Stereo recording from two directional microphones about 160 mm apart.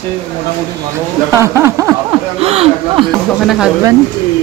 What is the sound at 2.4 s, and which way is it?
Speech, 40° right (ahead or behind).